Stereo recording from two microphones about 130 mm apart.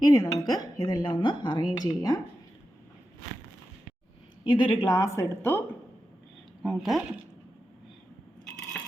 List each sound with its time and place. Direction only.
0.0 s a woman's voice: 30° left (ahead or behind)
4.4 s speech: 35° left (ahead or behind)
5.0 s a woman's voice: 20° left (ahead or behind)
6.6 s speech: centre (ahead or behind)